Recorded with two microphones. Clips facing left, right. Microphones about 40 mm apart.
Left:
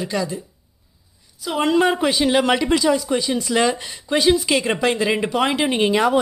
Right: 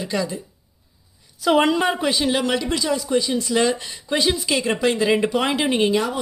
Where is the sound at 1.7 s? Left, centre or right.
Centre.